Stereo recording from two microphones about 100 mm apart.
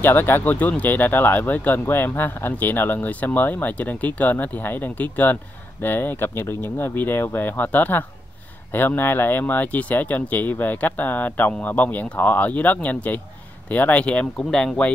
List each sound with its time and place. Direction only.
0.0 s speech: 20° left (ahead or behind)